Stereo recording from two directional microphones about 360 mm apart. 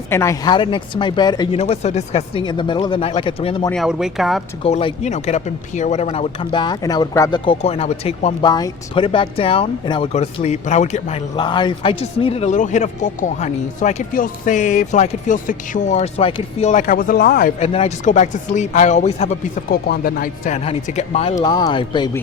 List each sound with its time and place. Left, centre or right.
0.1 s speech: centre
3.7 s speech: centre
4.6 s speech: centre